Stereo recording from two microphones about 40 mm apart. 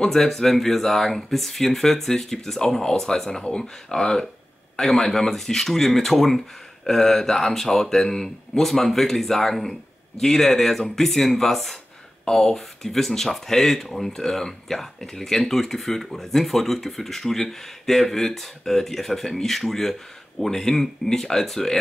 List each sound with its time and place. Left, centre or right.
0.0 s speech: centre